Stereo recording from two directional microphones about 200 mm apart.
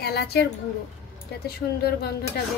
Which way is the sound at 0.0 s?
55° left (ahead or behind).